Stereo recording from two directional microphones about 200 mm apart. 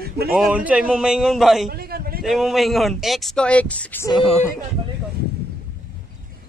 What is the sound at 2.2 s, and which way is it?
Speech, centre (ahead or behind).